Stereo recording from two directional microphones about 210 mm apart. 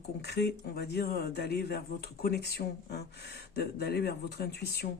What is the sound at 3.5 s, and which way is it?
Speech, 50° left (ahead or behind).